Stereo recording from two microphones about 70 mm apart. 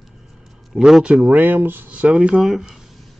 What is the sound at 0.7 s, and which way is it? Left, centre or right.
Speech, centre.